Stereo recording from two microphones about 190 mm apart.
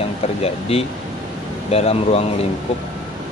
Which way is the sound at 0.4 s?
30° left (ahead or behind).